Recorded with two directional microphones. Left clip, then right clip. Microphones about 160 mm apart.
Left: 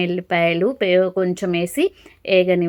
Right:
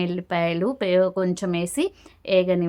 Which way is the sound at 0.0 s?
15° left (ahead or behind).